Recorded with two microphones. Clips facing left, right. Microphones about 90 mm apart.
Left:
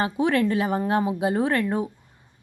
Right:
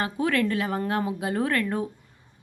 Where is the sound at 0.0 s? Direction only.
25° left (ahead or behind).